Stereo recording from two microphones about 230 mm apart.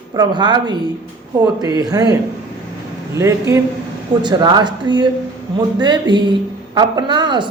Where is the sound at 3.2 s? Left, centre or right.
Centre.